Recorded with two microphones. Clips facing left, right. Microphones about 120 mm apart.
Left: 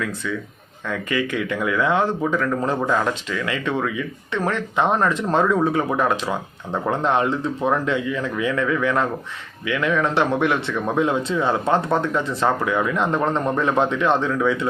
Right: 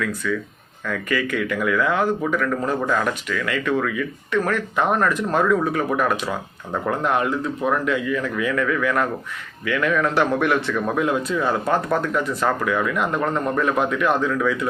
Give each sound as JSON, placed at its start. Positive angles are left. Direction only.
{"t": 0.9, "sound": "speech", "side_deg": 20}